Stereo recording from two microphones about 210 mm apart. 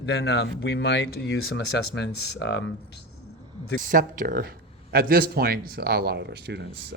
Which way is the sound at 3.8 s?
40° right (ahead or behind).